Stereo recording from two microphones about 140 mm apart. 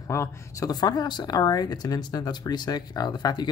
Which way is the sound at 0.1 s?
20° left (ahead or behind).